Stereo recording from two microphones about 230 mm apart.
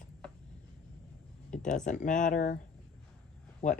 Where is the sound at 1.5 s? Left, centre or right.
Left.